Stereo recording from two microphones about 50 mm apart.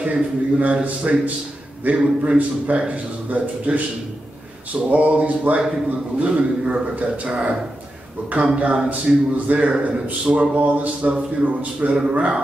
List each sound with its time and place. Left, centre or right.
0.0 s a man's voice: right
8.5 s a man's voice: right